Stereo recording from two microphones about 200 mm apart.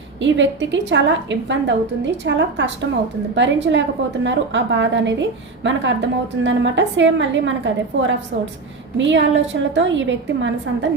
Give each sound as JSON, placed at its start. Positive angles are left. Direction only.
{"t": 0.2, "sound": "a woman's voice", "side_deg": -65}